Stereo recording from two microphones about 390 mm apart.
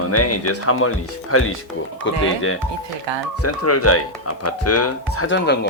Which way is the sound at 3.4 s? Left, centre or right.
Left.